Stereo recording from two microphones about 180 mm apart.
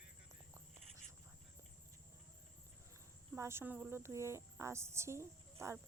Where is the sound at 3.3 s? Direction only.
15° right (ahead or behind).